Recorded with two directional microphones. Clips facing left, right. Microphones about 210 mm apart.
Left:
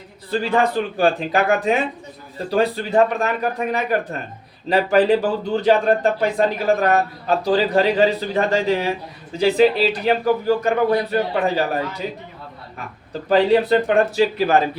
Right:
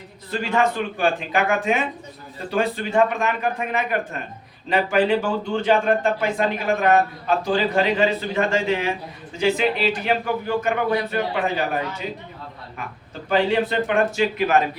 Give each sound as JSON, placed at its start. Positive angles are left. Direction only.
{"t": 0.3, "sound": "a man's voice", "side_deg": 35}
{"t": 13.2, "sound": "a man's voice", "side_deg": 35}